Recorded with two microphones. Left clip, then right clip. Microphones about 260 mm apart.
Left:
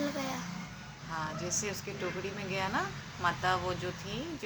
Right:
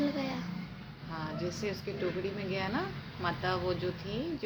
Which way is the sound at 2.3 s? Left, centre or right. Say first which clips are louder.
Left 1 dB; centre.